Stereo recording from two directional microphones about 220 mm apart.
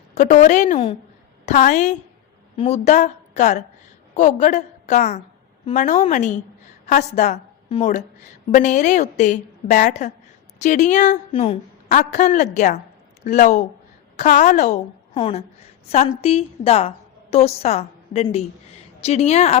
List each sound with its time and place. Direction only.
0.1 s a woman's voice: 35° left (ahead or behind)